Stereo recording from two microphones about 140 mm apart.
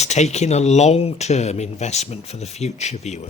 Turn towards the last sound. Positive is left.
turn(degrees=50)  # may be behind; listen again after turning